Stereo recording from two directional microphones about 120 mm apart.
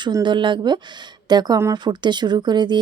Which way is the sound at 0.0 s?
40° right (ahead or behind).